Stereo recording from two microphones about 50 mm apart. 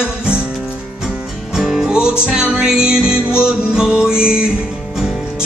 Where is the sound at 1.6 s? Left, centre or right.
Centre.